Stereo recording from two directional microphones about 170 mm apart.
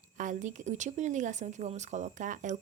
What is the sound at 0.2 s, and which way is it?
A woman's voice, 45° right (ahead or behind).